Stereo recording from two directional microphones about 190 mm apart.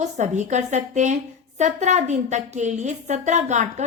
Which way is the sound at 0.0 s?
40° right (ahead or behind).